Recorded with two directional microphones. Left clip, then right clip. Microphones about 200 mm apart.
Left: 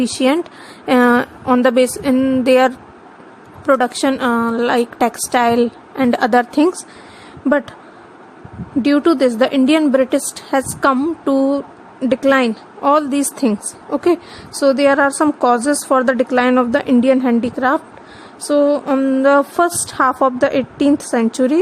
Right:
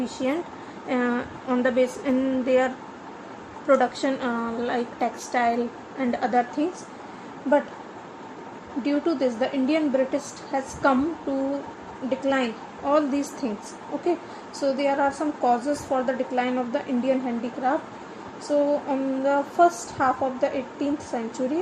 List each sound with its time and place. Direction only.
0.0 s a woman's voice: 45° left (ahead or behind)
8.8 s a woman's voice: 50° left (ahead or behind)
14.6 s a woman's voice: 45° left (ahead or behind)